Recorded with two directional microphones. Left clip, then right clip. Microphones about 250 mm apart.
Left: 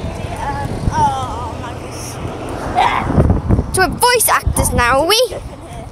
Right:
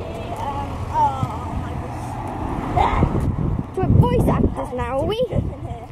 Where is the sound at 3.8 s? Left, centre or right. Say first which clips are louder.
Left 8 dB; centre.